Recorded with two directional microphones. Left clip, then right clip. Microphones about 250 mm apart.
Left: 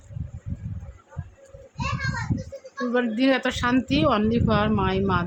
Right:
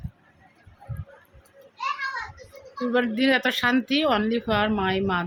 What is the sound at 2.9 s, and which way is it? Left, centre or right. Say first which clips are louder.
Speech: even; centre.